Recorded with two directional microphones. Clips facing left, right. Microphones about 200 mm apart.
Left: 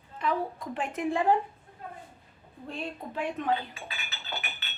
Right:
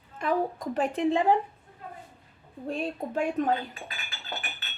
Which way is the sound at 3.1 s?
45° right (ahead or behind).